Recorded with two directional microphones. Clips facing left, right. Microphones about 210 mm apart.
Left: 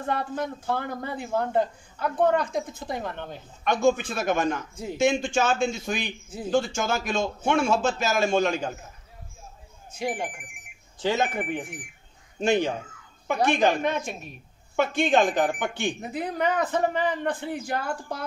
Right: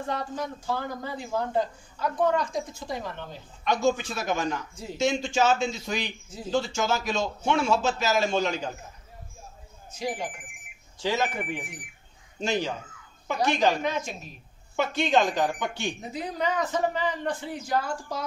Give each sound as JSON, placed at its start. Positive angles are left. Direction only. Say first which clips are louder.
{"t": 0.0, "sound": "a man's voice", "louder": "left 3 dB", "side_deg": 55}
{"t": 9.8, "sound": "a man's voice", "louder": "left 2 dB", "side_deg": 55}